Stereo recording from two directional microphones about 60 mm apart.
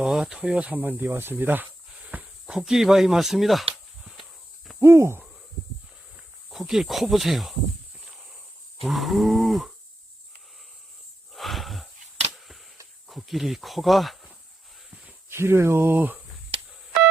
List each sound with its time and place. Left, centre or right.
0.0 s speech: centre
0.8 s speech: right
2.2 s cricket: centre
4.8 s hoot: right
6.1 s speech: centre
8.8 s speech: centre
11.3 s a sound: centre
13.1 s speech: centre
14.8 s a sound: centre
15.3 s speech: right